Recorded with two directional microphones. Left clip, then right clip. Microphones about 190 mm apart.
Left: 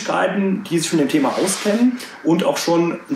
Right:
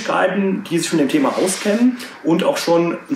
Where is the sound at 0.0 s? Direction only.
Centre (ahead or behind).